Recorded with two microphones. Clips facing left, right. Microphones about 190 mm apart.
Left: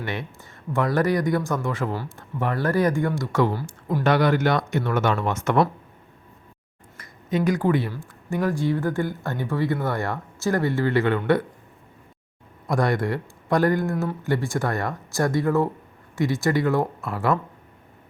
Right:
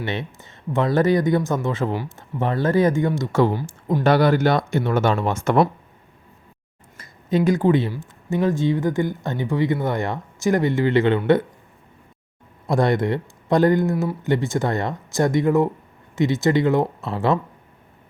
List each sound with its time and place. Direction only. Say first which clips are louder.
0.0 s speech: right 3 dB; 25° right (ahead or behind)
4.0 s speech: right 3 dB; 35° right (ahead or behind)
6.9 s speech: right 4 dB; 30° right (ahead or behind)
12.6 s speech: right 3 dB; 25° right (ahead or behind)
13.9 s speech: right 3 dB; 10° right (ahead or behind)
14.3 s speech: right 4 dB; 20° right (ahead or behind)